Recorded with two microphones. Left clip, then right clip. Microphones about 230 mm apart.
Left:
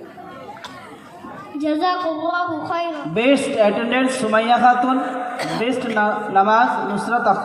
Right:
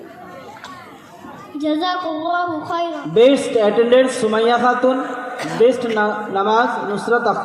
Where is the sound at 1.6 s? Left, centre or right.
Left.